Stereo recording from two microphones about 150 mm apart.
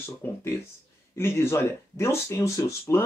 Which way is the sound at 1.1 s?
15° left (ahead or behind).